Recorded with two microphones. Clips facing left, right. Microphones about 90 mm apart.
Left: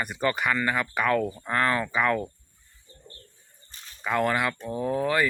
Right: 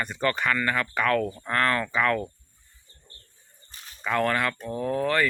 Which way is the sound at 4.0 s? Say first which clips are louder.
Even; 10° left (ahead or behind).